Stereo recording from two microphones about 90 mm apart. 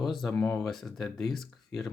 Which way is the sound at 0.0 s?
Centre (ahead or behind).